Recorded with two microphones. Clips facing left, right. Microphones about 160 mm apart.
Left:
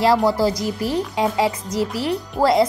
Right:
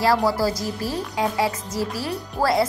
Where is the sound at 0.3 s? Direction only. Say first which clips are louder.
Left 3 dB; 20° left (ahead or behind).